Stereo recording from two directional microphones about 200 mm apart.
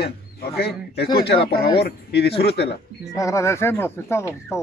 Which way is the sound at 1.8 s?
55° left (ahead or behind).